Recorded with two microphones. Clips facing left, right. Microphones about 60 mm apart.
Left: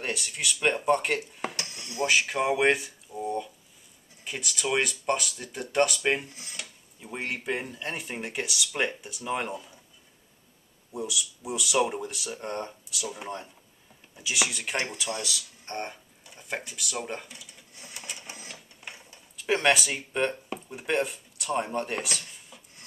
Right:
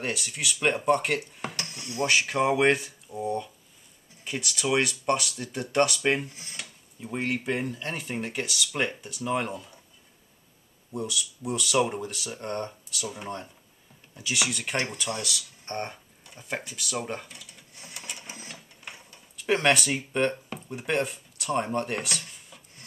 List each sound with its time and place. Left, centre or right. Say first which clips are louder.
0.0 s speech: right 1 dB; centre
1.7 s dishes: right 3 dB; right
2.0 s speech: right 1 dB; centre
10.9 s speech: right 1 dB; centre
18.9 s a sound: even; centre
20.6 s speech: even; centre